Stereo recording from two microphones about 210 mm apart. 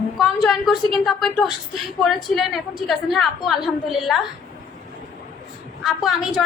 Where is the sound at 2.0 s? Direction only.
Centre (ahead or behind).